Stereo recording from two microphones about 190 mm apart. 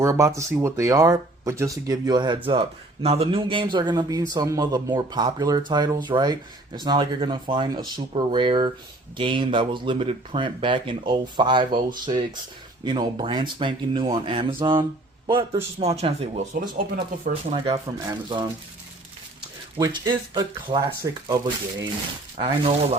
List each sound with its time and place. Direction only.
0.0 s speech: 15° right (ahead or behind); by 16.6 s 40° right (ahead or behind)
17.5 s speech: 20° right (ahead or behind)
19.8 s speech: 25° right (ahead or behind)